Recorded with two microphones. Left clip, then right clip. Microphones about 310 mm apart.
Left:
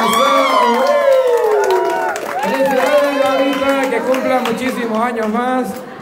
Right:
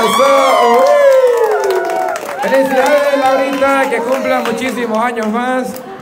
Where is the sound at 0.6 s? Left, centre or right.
Right.